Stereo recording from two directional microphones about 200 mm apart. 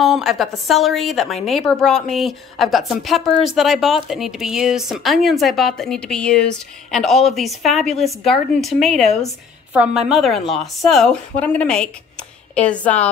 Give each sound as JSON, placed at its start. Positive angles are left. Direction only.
{"t": 0.0, "sound": "a woman's voice", "side_deg": 0}